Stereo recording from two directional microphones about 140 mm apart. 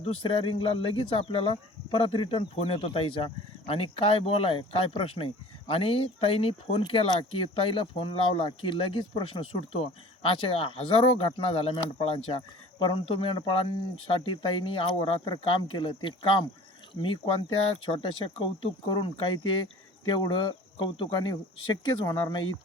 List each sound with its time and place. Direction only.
0.0 s speech: 40° left (ahead or behind)